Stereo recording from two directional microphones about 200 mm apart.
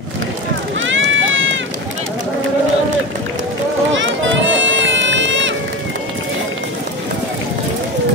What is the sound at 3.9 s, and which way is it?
Run, 70° right (ahead or behind).